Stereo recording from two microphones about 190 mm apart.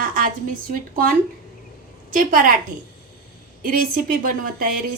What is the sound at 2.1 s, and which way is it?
Speech, 45° right (ahead or behind).